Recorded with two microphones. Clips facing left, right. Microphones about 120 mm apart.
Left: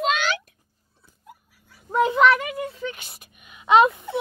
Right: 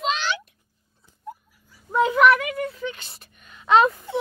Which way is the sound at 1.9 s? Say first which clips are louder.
Right 1 dB; 25° left (ahead or behind).